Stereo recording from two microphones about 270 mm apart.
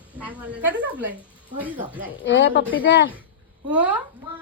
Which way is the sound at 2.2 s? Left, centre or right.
Left.